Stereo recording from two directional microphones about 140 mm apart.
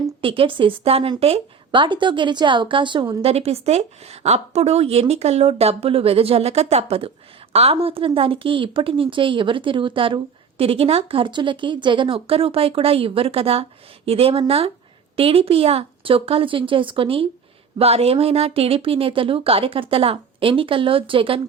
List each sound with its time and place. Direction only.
0.2 s a woman's voice: 40° right (ahead or behind)